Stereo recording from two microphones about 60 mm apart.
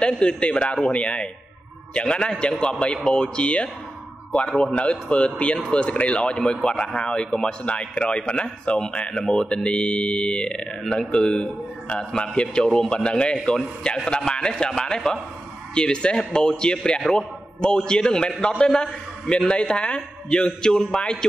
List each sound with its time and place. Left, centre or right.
0.0 s a man's voice: centre